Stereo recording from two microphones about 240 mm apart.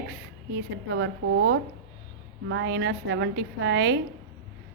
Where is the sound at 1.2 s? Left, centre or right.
Right.